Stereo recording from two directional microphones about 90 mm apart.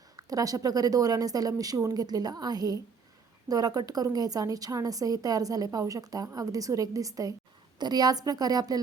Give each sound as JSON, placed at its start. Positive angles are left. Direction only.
{"t": 0.2, "sound": "a woman's voice", "side_deg": -40}